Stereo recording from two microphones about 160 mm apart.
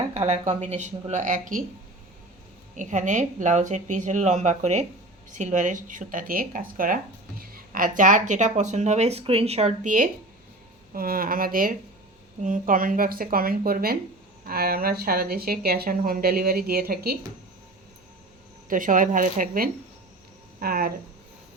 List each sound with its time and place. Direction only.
0.1 s speech: 45° right (ahead or behind)
2.7 s speech: 50° right (ahead or behind)
10.9 s speech: 65° right (ahead or behind)
18.7 s speech: 55° right (ahead or behind)